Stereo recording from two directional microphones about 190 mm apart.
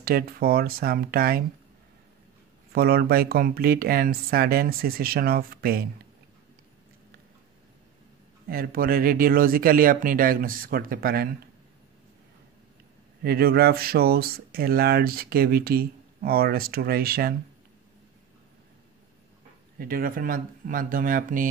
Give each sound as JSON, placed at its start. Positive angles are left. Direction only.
{"t": 0.0, "sound": "speech", "side_deg": -50}
{"t": 2.7, "sound": "speech", "side_deg": -55}
{"t": 8.5, "sound": "speech", "side_deg": -50}
{"t": 13.2, "sound": "speech", "side_deg": -55}
{"t": 19.8, "sound": "speech", "side_deg": -50}